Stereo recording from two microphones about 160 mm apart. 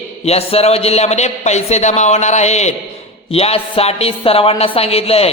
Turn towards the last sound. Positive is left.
turn(degrees=40)  # may be behind; listen again after turning